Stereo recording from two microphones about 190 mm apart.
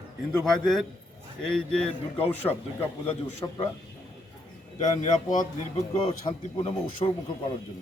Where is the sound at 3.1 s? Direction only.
30° left (ahead or behind).